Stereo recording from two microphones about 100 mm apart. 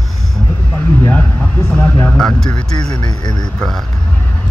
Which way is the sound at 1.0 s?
15° left (ahead or behind).